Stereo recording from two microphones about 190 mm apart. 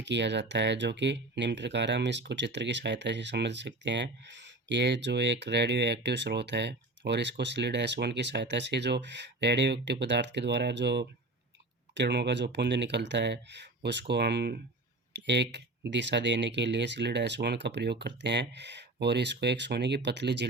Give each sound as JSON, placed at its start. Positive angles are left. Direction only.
{"t": 0.0, "sound": "speech", "side_deg": -65}